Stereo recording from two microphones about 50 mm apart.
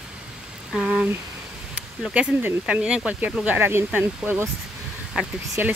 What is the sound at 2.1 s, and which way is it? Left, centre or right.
Speech, right.